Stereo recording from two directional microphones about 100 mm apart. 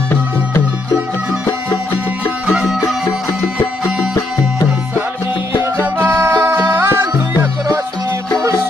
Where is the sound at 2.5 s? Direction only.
5° right (ahead or behind).